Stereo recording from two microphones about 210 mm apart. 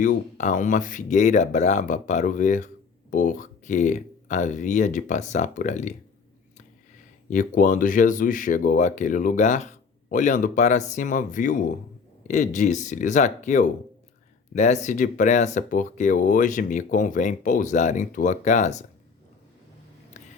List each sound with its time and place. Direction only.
0.0 s speech: 40° left (ahead or behind)
7.3 s speech: 40° left (ahead or behind)
20.1 s a sound: 35° left (ahead or behind)